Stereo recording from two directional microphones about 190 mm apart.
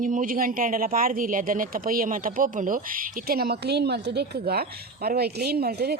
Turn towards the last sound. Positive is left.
turn(degrees=-55)  # may be behind; listen again after turning